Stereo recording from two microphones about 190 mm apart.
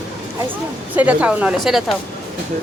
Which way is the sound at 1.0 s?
10° right (ahead or behind).